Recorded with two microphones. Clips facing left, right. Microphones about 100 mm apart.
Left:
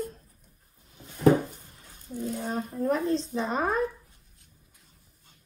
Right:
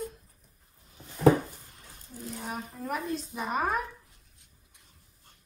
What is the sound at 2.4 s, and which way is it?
Speech, centre (ahead or behind).